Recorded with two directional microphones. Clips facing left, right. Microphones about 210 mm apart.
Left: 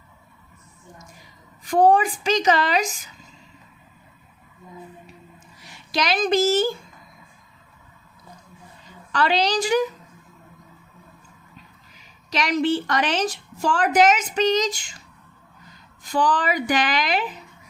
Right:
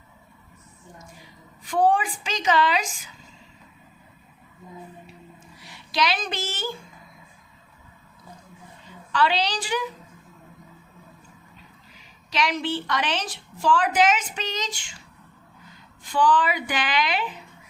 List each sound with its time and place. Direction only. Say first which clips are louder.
1.6 s a woman's voice: left 4 dB; 40° left (ahead or behind)
5.9 s a woman's voice: left 5 dB; 45° left (ahead or behind)
9.1 s a woman's voice: left 3 dB; 45° left (ahead or behind)
12.3 s a woman's voice: left 5 dB; 45° left (ahead or behind)
16.0 s a woman's voice: even; 40° left (ahead or behind)